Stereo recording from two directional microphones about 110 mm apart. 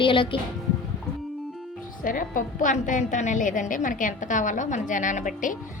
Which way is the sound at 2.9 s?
90° left.